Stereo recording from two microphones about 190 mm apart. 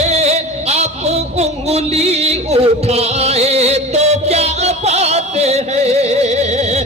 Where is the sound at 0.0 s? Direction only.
35° right (ahead or behind).